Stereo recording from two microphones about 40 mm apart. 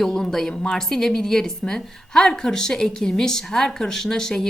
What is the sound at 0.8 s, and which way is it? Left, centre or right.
Speech, centre.